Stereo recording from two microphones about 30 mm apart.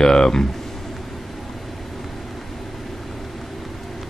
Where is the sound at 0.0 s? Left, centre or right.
Left.